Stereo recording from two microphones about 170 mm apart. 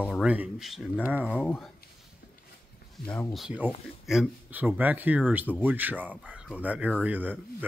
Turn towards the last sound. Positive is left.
turn(degrees=-10)  # may be behind; listen again after turning